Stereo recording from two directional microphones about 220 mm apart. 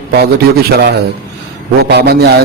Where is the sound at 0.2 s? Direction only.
45° right (ahead or behind).